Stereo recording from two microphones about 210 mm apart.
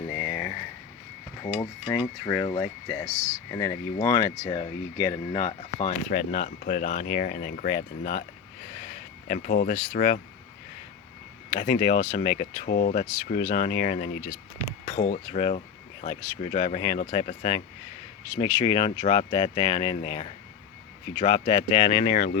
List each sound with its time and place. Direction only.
0.1 s a sound: 25° left (ahead or behind)
1.5 s speech: 25° left (ahead or behind)
5.7 s speech: 35° left (ahead or behind)
9.3 s speech: 40° left (ahead or behind)
11.5 s speech: 30° left (ahead or behind)
14.8 s a sound: 40° left (ahead or behind)
15.3 s speech: 30° left (ahead or behind)